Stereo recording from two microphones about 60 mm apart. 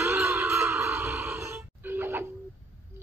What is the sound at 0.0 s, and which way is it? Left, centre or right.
Music, right.